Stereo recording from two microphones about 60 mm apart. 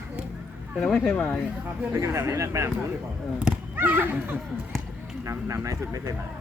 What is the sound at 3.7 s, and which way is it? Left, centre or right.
Speech, right.